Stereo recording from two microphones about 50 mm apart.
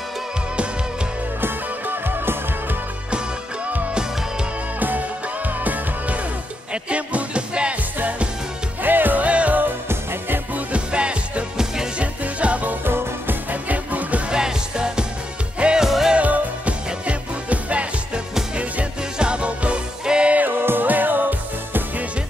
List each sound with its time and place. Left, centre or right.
1.4 s music: right
4.7 s music: right
8.8 s music: right; by 11.9 s centre
12.0 s music: right
12.8 s music: right
13.5 s music: right
14.3 s music: centre
16.2 s music: right
20.3 s music: right